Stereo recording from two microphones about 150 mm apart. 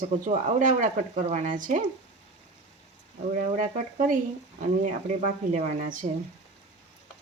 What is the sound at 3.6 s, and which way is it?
Speech, 60° right (ahead or behind).